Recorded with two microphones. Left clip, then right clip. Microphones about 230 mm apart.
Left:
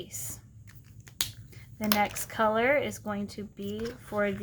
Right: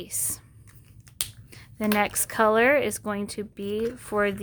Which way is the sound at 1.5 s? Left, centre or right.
Right.